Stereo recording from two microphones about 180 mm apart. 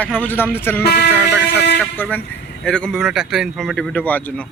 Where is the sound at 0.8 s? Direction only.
60° left (ahead or behind).